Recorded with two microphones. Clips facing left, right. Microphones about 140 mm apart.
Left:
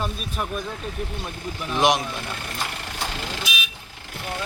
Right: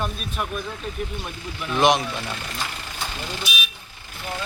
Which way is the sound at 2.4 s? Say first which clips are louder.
Left 1 dB; 55° left (ahead or behind).